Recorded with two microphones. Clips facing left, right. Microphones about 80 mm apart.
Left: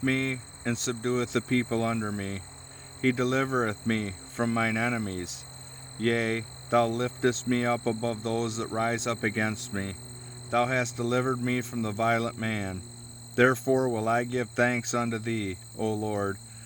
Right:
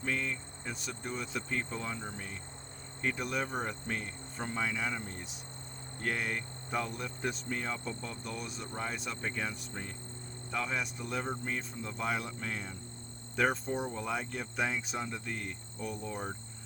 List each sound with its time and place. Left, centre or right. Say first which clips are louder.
0.0 s speech: left 7 dB; left
10.5 s speech: left 10 dB; left